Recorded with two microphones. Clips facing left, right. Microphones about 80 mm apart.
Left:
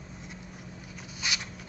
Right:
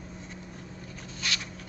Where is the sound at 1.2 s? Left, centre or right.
Centre.